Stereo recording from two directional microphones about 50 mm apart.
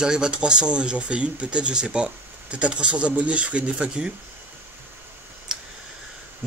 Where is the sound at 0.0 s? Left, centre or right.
Centre.